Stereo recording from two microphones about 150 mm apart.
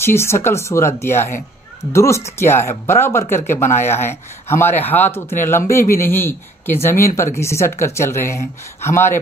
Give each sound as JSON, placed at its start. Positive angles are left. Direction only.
{"t": 0.0, "sound": "speech", "side_deg": 15}